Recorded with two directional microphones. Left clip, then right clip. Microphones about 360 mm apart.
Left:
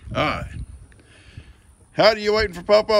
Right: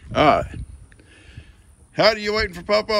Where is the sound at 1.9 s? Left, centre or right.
Centre.